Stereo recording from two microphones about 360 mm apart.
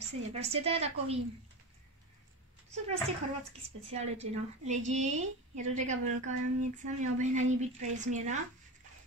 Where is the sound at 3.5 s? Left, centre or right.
Centre.